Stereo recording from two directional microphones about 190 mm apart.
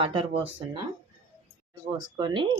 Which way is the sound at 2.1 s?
25° right (ahead or behind).